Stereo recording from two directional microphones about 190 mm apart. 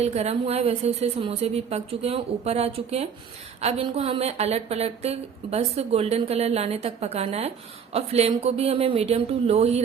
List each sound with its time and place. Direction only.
0.0 s a woman's voice: 35° right (ahead or behind)